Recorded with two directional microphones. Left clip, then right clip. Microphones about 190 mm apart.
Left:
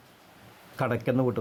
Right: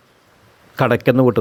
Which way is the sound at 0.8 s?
40° right (ahead or behind).